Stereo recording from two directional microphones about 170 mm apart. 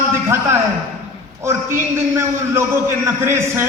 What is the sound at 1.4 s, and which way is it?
A man's voice, 15° right (ahead or behind).